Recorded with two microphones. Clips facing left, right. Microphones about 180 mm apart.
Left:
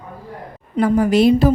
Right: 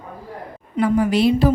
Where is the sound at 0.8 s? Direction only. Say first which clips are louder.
Left 3 dB; 40° left (ahead or behind).